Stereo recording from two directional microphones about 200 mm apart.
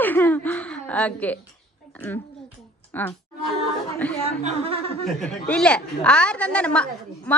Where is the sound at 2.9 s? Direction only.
10° left (ahead or behind).